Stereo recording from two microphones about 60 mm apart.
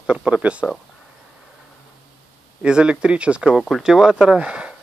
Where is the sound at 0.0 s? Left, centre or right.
Centre.